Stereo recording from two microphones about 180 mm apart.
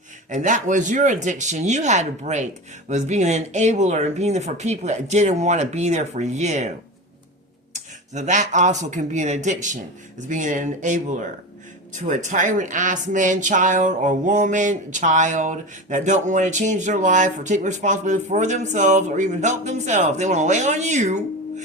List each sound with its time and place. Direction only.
0.3 s speech: 45° right (ahead or behind)
7.7 s speech: 45° right (ahead or behind)